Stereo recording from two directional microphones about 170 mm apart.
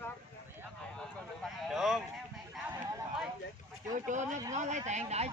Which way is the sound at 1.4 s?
Centre (ahead or behind).